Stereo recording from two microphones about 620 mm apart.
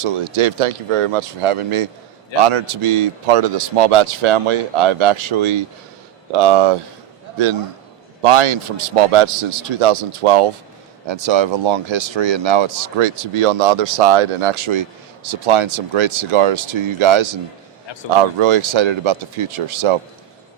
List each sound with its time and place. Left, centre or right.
0.0 s a man's voice: right
8.2 s a man's voice: right